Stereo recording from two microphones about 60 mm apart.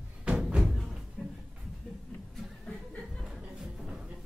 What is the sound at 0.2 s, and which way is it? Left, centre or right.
Music, centre.